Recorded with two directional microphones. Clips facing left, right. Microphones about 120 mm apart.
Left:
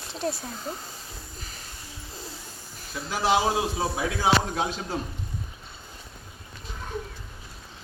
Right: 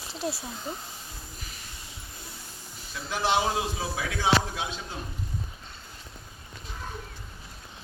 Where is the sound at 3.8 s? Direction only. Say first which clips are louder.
Left 4 dB; 25° left (ahead or behind).